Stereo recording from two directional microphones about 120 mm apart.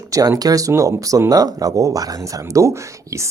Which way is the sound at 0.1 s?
30° right (ahead or behind).